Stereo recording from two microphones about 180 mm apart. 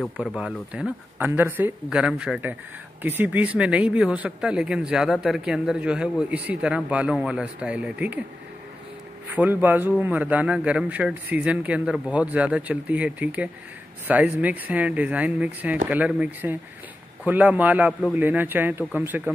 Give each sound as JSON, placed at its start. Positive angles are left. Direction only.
{"t": 0.0, "sound": "speech", "side_deg": 0}
{"t": 9.3, "sound": "speech", "side_deg": -10}